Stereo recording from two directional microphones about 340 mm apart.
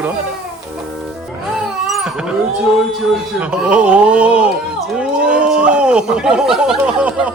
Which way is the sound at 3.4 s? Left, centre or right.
Centre.